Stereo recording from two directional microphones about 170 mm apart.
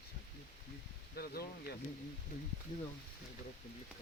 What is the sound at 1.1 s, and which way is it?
Speech, 65° left (ahead or behind).